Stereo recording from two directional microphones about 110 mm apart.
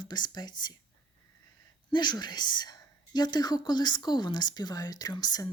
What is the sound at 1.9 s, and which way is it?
Speech, 40° left (ahead or behind).